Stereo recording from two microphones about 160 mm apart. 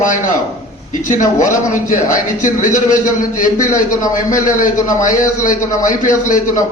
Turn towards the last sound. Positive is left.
turn(degrees=55)  # may be behind; listen again after turning